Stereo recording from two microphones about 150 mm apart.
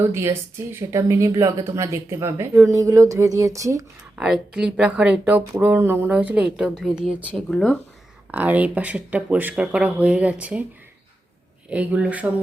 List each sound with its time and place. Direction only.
0.0 s speech: 15° right (ahead or behind)
4.1 s speech: 5° right (ahead or behind)
7.5 s speech: 5° left (ahead or behind)
8.3 s speech: 10° right (ahead or behind)
11.7 s speech: 10° right (ahead or behind)